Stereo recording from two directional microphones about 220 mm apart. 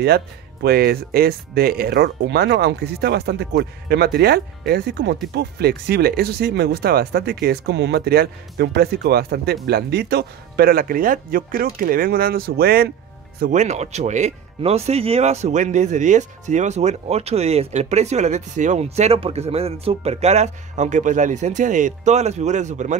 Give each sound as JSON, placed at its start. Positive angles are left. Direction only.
{"t": 0.0, "sound": "speech", "side_deg": -45}
{"t": 13.4, "sound": "speech", "side_deg": -35}